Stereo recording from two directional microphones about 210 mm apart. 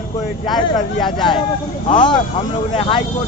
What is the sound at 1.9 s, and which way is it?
Speech, 20° left (ahead or behind).